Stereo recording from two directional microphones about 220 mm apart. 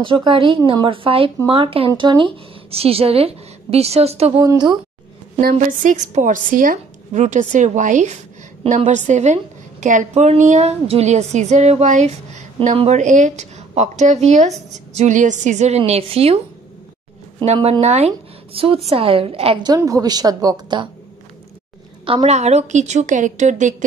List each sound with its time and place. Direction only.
0.0 s speech: 20° right (ahead or behind)
5.4 s a woman's voice: 40° right (ahead or behind)
17.4 s speech: 25° right (ahead or behind)
22.0 s a woman's voice: 25° right (ahead or behind)